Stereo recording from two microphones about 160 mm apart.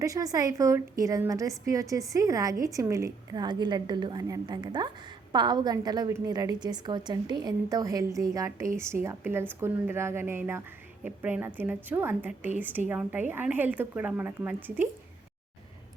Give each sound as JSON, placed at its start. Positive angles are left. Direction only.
{"t": 0.0, "sound": "a woman's voice", "side_deg": -20}